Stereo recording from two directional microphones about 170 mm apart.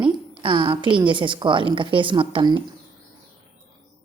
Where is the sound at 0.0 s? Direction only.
30° right (ahead or behind).